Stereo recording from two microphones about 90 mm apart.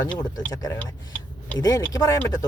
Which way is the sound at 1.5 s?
45° left (ahead or behind).